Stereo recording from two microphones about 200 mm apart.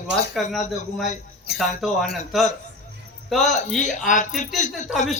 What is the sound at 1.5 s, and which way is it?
Speech, 55° left (ahead or behind).